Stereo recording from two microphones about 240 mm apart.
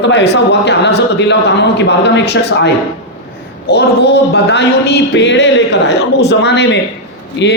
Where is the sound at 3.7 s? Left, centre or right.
Left.